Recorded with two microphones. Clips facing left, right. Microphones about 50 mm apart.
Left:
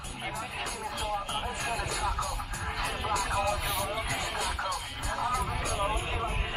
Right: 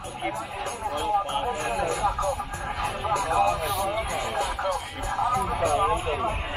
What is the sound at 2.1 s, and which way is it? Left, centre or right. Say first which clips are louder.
Music: right 7 dB; right.